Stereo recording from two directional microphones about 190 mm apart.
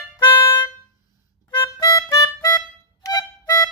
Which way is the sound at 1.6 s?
20° left (ahead or behind).